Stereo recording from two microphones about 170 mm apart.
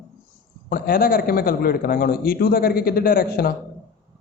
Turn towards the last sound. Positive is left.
turn(degrees=60)  # may be behind; listen again after turning